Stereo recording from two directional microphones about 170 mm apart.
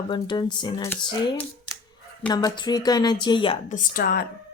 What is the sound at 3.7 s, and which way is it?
Speech, 55° left (ahead or behind).